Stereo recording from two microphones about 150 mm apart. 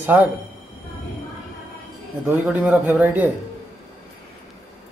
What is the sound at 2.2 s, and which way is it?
Speech, 10° right (ahead or behind).